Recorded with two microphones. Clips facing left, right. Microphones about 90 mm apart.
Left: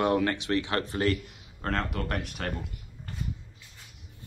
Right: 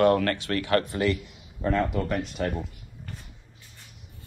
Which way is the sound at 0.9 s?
35° left (ahead or behind).